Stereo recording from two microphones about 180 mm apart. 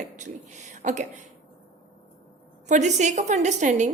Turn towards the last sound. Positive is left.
turn(degrees=-40)  # may be behind; listen again after turning